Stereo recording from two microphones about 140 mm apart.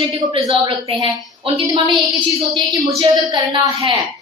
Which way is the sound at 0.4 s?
35° right (ahead or behind).